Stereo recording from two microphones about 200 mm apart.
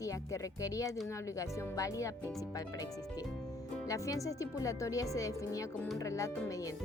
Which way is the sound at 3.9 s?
15° left (ahead or behind).